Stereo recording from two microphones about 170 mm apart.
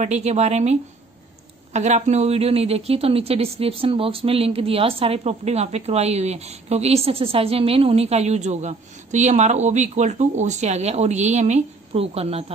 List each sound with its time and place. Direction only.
0.0 s a woman's voice: 40° right (ahead or behind)